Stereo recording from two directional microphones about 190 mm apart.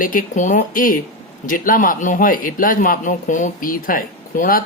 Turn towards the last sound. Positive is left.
turn(degrees=50)  # may be behind; listen again after turning